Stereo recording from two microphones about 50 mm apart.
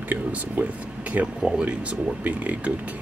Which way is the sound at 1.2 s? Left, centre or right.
Centre.